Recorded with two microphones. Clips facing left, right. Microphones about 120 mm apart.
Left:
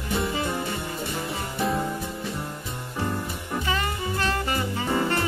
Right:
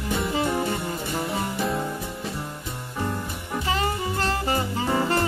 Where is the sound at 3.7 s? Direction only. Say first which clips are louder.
Right 4 dB; 30° right (ahead or behind).